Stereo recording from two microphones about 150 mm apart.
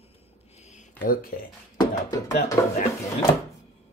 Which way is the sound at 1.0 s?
75° left (ahead or behind).